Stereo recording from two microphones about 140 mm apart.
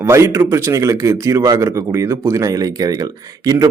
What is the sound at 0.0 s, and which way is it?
A man's voice, 20° right (ahead or behind).